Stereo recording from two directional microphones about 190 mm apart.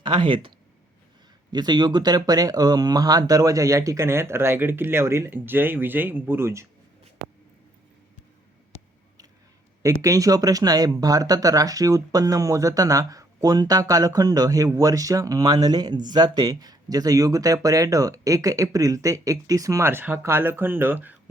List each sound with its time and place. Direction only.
0.0 s speech: 25° right (ahead or behind)
1.5 s speech: 20° right (ahead or behind)
9.8 s speech: 15° right (ahead or behind)